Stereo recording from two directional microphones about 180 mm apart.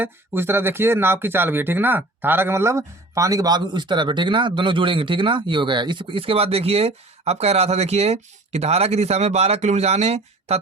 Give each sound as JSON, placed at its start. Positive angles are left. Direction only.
{"t": 0.0, "sound": "speech", "side_deg": -10}